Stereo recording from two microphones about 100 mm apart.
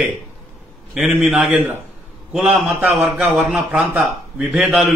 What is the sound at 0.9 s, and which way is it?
Speech, 5° right (ahead or behind).